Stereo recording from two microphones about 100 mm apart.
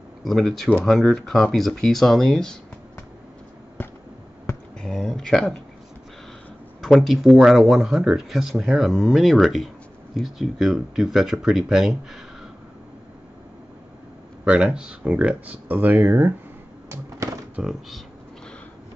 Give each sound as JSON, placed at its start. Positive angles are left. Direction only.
{"t": 0.2, "sound": "speech", "side_deg": 5}
{"t": 4.8, "sound": "speech", "side_deg": 5}
{"t": 6.8, "sound": "speech", "side_deg": 0}
{"t": 14.4, "sound": "speech", "side_deg": -10}
{"t": 16.9, "sound": "a sound", "side_deg": -30}
{"t": 17.6, "sound": "speech", "side_deg": -5}